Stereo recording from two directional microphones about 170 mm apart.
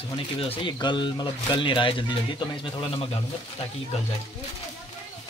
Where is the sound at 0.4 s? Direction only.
30° left (ahead or behind).